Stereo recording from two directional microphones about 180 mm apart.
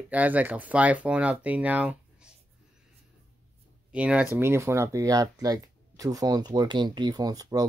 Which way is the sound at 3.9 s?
5° right (ahead or behind).